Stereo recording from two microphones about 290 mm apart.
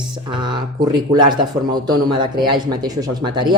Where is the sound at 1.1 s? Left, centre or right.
Centre.